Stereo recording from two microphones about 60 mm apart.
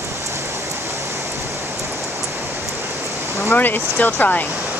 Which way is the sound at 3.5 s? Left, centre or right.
Left.